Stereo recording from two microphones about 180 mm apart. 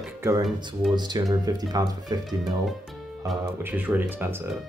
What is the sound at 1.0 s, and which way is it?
Speech, 25° right (ahead or behind).